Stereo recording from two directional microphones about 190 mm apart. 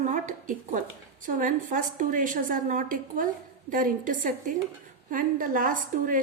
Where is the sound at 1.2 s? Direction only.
45° right (ahead or behind).